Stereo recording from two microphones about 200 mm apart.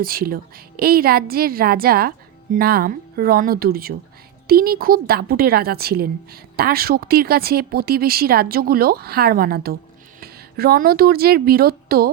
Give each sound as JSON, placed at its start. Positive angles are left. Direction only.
{"t": 0.0, "sound": "a woman's voice", "side_deg": -45}